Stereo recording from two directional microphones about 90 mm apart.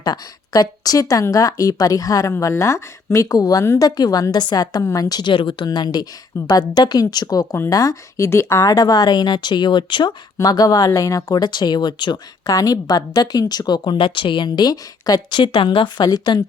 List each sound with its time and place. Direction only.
0.0 s a woman's voice: 50° left (ahead or behind)
5.3 s speech: 65° left (ahead or behind)
5.6 s a woman's voice: 50° left (ahead or behind)
10.4 s a woman's voice: 45° left (ahead or behind)
12.5 s a woman's voice: 40° left (ahead or behind); by 16.0 s 70° left (ahead or behind)
16.0 s a woman's voice: 50° left (ahead or behind)